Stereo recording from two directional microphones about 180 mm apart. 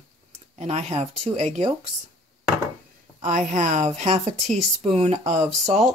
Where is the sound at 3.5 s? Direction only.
40° right (ahead or behind).